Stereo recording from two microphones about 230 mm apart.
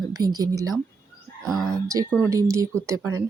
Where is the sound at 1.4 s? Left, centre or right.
Centre.